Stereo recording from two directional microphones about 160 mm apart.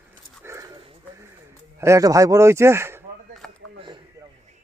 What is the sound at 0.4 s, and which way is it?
Dog, 20° right (ahead or behind).